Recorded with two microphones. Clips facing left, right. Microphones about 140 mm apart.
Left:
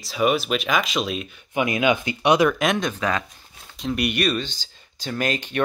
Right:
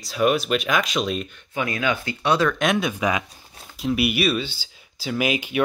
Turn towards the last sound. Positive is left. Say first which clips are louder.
# right 2 dB
turn(degrees=-10)  # may be behind; listen again after turning